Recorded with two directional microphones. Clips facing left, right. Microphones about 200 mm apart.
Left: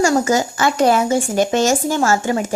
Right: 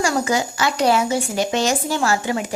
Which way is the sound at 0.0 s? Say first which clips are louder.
Left 5 dB; 45° left (ahead or behind).